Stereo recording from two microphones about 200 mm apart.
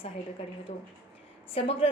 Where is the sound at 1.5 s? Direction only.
30° left (ahead or behind).